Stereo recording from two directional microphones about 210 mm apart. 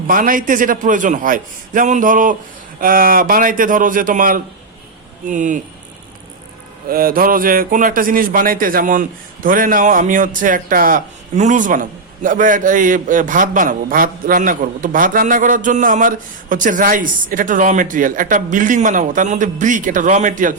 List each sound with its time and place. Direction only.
0.1 s speech: 40° right (ahead or behind)
6.8 s speech: 45° right (ahead or behind)